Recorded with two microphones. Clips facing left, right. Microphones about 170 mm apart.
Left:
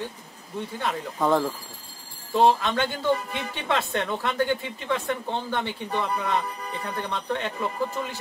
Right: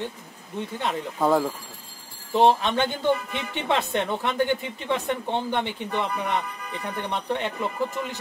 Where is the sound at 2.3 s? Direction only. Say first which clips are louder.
Right 1 dB; 20° right (ahead or behind).